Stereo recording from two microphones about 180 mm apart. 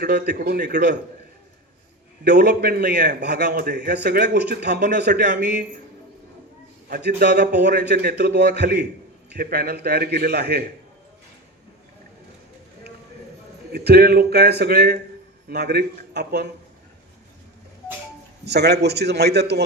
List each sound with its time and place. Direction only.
0.0 s a man's voice: 65° right (ahead or behind)
2.2 s a man's voice: 65° right (ahead or behind)
6.8 s a man's voice: 65° right (ahead or behind)
13.7 s a man's voice: 60° right (ahead or behind)
18.4 s a man's voice: 65° right (ahead or behind)